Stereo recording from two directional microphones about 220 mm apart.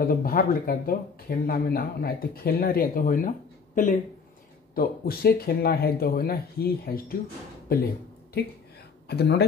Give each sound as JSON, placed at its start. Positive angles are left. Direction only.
{"t": 0.0, "sound": "speech", "side_deg": 40}
{"t": 9.1, "sound": "speech", "side_deg": 50}